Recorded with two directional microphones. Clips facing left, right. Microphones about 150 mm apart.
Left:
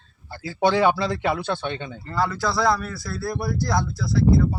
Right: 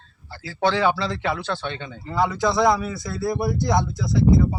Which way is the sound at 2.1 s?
20° right (ahead or behind).